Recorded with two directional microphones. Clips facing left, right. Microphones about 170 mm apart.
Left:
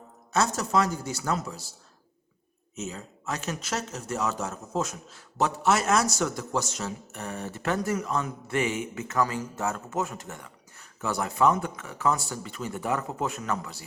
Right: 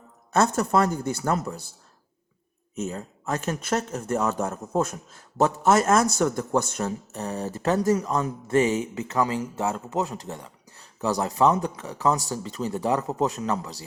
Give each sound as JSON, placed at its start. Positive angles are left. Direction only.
{"t": 0.3, "sound": "speech", "side_deg": -55}
{"t": 2.7, "sound": "a man's voice", "side_deg": -50}
{"t": 7.1, "sound": "speech", "side_deg": -40}